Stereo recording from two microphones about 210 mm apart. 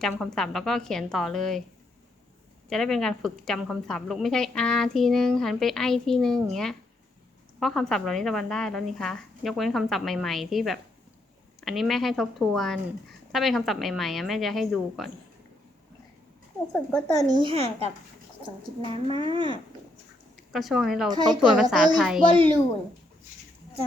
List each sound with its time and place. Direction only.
0.0 s a woman's voice: centre (ahead or behind)
2.6 s a woman's voice: centre (ahead or behind)
17.2 s speech: 20° right (ahead or behind)
18.8 s speech: 20° left (ahead or behind)
20.5 s a woman's voice: centre (ahead or behind)
21.1 s speech: 20° right (ahead or behind)
21.5 s a woman's voice: 5° right (ahead or behind)